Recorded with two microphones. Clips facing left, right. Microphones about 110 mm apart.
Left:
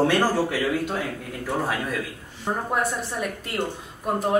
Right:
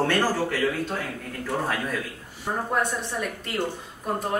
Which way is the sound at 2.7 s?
5° left (ahead or behind).